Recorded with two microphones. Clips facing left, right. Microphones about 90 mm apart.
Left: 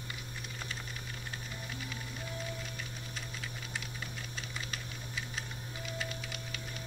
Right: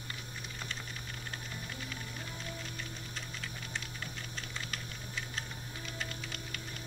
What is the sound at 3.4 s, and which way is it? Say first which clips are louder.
Typing: even; 5° left (ahead or behind).